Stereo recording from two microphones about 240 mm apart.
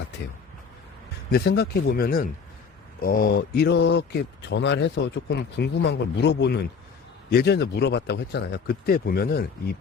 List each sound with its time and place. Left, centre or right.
1.3 s speech: left